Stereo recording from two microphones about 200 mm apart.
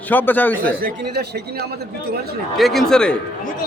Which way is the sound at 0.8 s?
55° right (ahead or behind).